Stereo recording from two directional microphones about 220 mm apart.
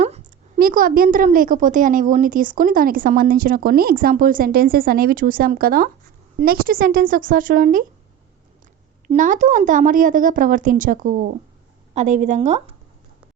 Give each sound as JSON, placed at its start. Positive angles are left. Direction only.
{"t": 0.0, "sound": "a woman's voice", "side_deg": -35}
{"t": 9.0, "sound": "a woman's voice", "side_deg": -35}